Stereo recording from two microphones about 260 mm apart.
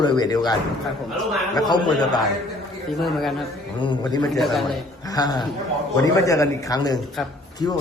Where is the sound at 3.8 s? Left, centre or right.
Centre.